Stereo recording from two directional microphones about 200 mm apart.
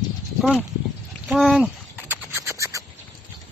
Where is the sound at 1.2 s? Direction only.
Centre (ahead or behind).